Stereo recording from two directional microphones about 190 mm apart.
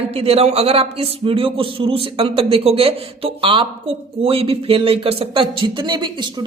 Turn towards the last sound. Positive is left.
turn(degrees=-25)  # may be behind; listen again after turning